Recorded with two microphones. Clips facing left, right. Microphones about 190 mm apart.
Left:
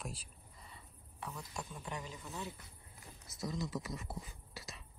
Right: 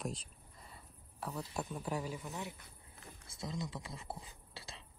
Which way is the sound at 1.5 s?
5° right (ahead or behind).